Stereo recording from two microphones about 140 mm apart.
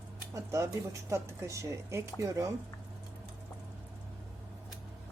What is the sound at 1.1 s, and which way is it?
Speech, 20° right (ahead or behind).